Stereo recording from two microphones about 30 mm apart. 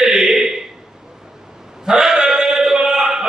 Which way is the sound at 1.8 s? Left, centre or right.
Right.